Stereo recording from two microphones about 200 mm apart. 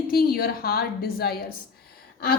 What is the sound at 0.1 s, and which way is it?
A woman's voice, 50° left (ahead or behind).